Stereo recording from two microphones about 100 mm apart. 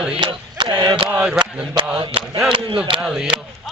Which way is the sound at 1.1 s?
10° right (ahead or behind).